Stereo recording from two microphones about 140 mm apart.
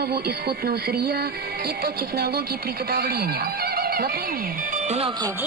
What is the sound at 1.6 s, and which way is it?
Speech, 90° right.